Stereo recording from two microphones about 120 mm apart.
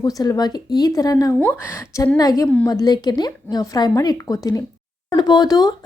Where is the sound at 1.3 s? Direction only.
20° left (ahead or behind).